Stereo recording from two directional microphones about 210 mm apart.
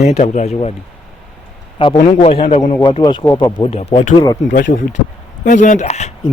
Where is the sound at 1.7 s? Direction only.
25° left (ahead or behind).